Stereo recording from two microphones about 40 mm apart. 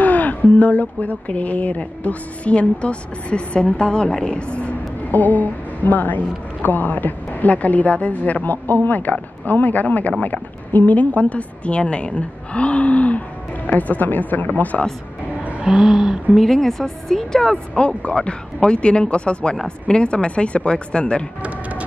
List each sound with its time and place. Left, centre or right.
0.0 s a woman's voice: left
5.1 s a woman's voice: left
15.8 s speech: centre
16.3 s a woman's voice: centre
17.7 s speech: left
21.4 s a sound: right